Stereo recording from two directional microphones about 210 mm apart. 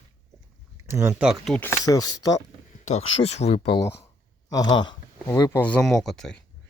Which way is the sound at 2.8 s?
30° left (ahead or behind).